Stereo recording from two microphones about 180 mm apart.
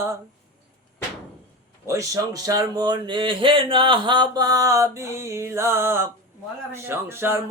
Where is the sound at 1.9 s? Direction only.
20° right (ahead or behind).